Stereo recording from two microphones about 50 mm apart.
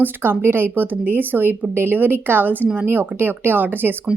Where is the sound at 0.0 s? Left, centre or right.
Right.